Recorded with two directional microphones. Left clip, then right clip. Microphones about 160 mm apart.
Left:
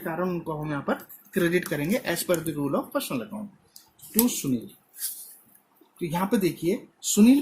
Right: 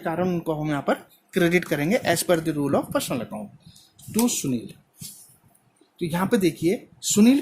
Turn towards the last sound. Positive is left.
turn(degrees=-70)  # may be behind; listen again after turning